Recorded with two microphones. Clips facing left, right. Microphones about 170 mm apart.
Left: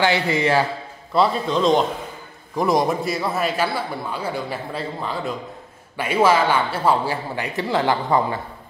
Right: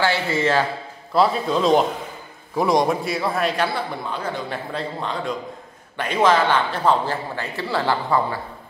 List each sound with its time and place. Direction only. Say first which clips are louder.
0.0 s a man's voice: left 1 dB; 15° left (ahead or behind)
1.1 s a man's voice: even; centre (ahead or behind); by 8.4 s 20° left (ahead or behind)